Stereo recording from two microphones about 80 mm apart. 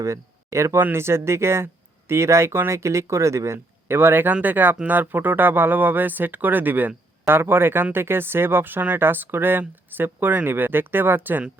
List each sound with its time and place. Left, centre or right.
0.0 s speech: right